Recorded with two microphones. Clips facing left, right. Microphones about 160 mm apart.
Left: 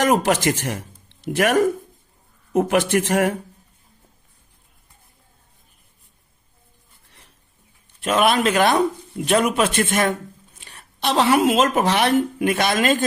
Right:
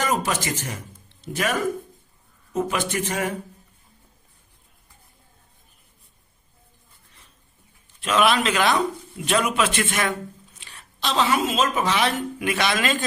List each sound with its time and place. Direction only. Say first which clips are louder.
0.0 s speech: left 7 dB; 75° left (ahead or behind)
7.1 s a sound: left 4 dB; 65° left (ahead or behind)
8.0 s speech: left 2 dB; 50° left (ahead or behind)